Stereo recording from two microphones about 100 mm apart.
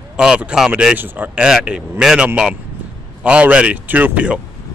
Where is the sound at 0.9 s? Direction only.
20° right (ahead or behind).